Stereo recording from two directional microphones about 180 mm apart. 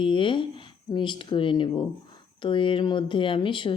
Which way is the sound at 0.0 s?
30° left (ahead or behind).